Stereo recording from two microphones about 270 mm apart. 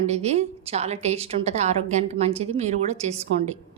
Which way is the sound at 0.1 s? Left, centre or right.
Right.